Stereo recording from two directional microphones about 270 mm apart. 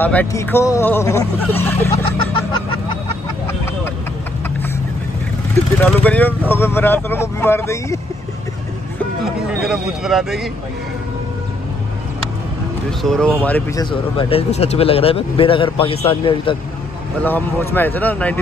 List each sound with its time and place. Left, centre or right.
0.0 s speech: centre
5.8 s speech: centre
9.2 s speech: centre
13.0 s speech: centre
17.2 s speech: centre